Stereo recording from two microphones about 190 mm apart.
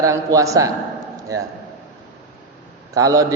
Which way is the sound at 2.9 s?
20° right (ahead or behind).